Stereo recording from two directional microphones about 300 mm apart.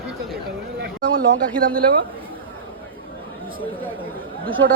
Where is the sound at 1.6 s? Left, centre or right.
Right.